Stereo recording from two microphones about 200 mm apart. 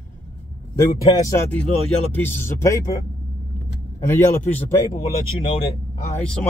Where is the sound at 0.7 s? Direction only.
15° left (ahead or behind).